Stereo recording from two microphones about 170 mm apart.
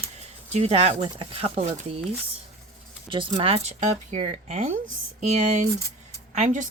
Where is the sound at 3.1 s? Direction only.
30° right (ahead or behind); by 4.8 s 50° right (ahead or behind).